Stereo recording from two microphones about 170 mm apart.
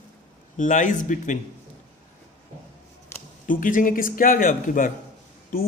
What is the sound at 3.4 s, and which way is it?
Speech, 50° left (ahead or behind).